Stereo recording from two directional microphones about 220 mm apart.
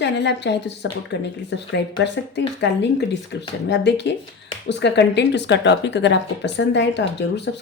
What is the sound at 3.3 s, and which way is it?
Speech, 50° left (ahead or behind).